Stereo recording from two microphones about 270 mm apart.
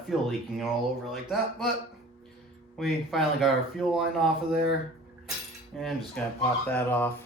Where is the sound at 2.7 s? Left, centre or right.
Centre.